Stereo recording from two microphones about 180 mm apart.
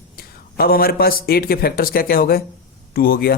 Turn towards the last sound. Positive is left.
turn(degrees=55)  # may be behind; listen again after turning